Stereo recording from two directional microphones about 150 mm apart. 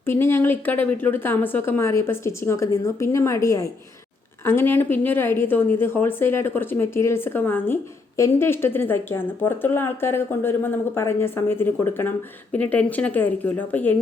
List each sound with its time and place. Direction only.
0.0 s a woman's voice: 15° left (ahead or behind)